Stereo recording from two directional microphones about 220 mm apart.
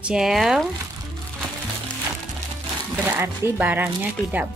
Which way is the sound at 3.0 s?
10° right (ahead or behind).